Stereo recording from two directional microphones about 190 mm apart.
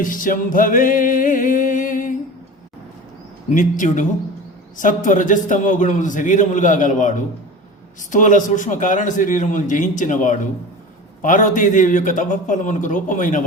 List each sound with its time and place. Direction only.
0.0 s music: 45° left (ahead or behind)
3.5 s a man's voice: 40° left (ahead or behind)
8.1 s a man's voice: 40° left (ahead or behind)